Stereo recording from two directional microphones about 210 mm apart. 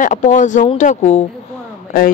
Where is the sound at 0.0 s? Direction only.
35° left (ahead or behind).